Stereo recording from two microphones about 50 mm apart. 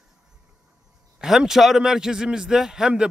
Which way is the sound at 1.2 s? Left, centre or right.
Centre.